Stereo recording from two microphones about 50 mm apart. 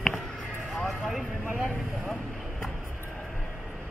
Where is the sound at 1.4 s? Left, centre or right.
Right.